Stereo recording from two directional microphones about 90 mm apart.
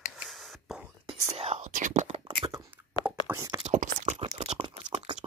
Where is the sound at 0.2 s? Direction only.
Centre (ahead or behind).